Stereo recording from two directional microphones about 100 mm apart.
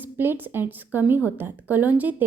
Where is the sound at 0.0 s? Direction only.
20° right (ahead or behind).